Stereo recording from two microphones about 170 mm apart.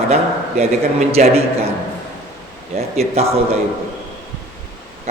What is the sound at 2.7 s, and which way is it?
Speech, 40° right (ahead or behind).